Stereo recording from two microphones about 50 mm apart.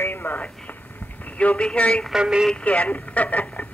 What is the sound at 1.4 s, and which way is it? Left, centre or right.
Speech, left.